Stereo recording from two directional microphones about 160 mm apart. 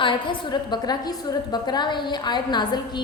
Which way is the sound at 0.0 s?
30° left (ahead or behind).